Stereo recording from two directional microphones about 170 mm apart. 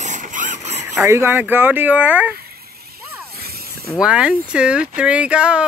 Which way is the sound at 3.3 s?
65° right (ahead or behind).